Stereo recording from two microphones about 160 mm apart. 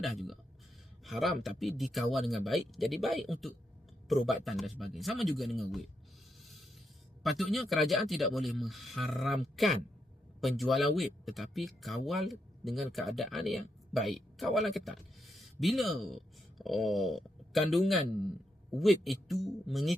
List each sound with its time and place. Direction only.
0.0 s speech: centre (ahead or behind)
6.4 s a sound: centre (ahead or behind)
7.2 s speech: centre (ahead or behind)